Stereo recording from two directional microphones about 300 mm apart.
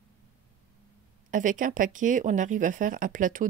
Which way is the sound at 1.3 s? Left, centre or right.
Right.